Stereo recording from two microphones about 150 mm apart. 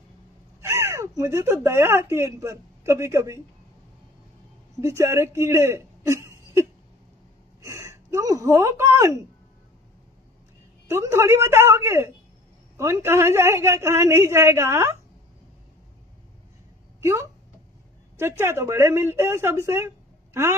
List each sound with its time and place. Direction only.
0.6 s speech: 15° right (ahead or behind)
4.8 s speech: 20° right (ahead or behind)
7.6 s speech: 20° right (ahead or behind)
10.9 s a woman's voice: 20° right (ahead or behind)
18.2 s a woman's voice: 15° right (ahead or behind)